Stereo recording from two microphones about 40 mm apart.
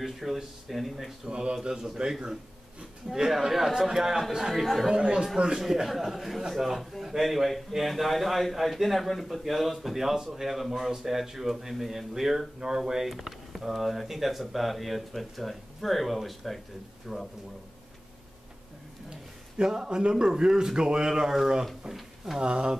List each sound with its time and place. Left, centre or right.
0.0 s a man's voice: centre
1.2 s speech: centre
3.1 s a man's voice: centre
4.5 s a man's voice: centre
4.8 s speech: centre
5.6 s a man's voice: centre
13.1 s a man's voice: centre
19.6 s speech: centre
22.4 s speech: right